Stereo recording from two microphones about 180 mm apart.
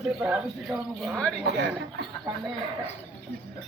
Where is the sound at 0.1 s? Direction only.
5° right (ahead or behind).